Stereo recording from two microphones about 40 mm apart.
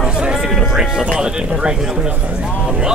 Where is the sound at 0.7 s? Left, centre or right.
Centre.